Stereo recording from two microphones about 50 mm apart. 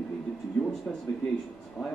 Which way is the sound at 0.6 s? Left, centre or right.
Centre.